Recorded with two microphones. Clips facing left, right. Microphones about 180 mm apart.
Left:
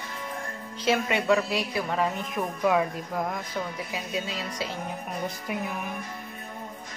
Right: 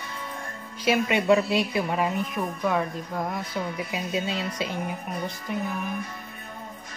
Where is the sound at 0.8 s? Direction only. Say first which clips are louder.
Right 3 dB; 20° right (ahead or behind).